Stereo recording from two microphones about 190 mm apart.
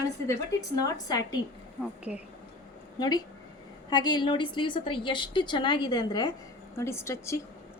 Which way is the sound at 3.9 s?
20° left (ahead or behind).